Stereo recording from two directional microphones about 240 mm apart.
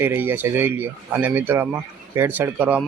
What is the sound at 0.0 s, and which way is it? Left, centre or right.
Speech, centre.